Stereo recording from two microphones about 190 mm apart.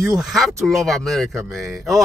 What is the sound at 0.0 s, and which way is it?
Speech, centre (ahead or behind).